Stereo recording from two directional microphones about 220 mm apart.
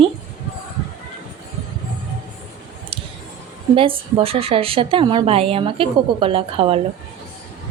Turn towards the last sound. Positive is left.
turn(degrees=-25)  # may be behind; listen again after turning